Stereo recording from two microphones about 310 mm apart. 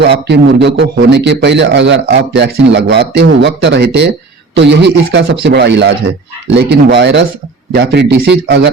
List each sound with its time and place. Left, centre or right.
0.0 s a man's voice: right